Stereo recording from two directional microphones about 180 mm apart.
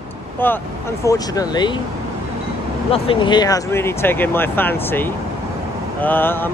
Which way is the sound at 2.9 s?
30° left (ahead or behind).